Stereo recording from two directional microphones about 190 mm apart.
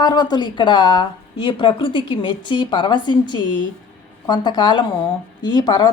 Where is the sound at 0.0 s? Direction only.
20° left (ahead or behind).